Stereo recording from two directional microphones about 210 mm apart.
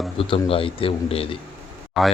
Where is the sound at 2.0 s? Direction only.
Centre (ahead or behind).